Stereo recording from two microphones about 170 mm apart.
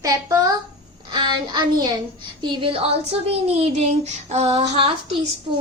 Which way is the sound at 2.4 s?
30° right (ahead or behind).